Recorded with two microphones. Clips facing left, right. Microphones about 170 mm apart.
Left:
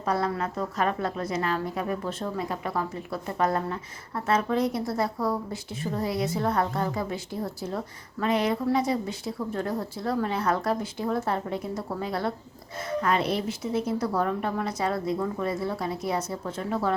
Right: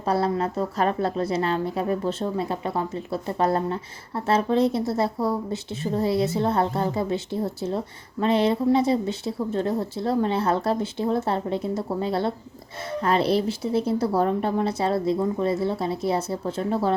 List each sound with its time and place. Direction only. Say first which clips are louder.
0.0 s a woman's voice: right 4 dB; 30° right (ahead or behind)